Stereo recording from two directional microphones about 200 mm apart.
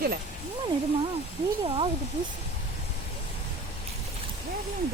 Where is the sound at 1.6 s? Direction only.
25° right (ahead or behind).